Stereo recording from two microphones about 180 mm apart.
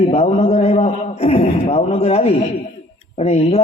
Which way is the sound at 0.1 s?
35° left (ahead or behind).